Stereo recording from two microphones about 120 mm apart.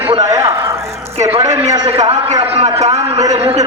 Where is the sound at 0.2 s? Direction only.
25° right (ahead or behind).